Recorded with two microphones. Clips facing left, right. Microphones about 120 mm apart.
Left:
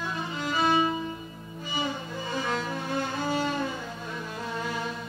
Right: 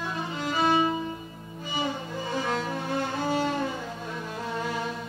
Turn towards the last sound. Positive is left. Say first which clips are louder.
# right 1 dB
turn(degrees=-45)  # may be behind; listen again after turning